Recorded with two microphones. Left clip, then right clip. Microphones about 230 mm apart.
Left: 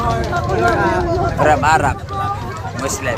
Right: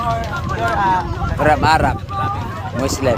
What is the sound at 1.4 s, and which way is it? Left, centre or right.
Speech, right.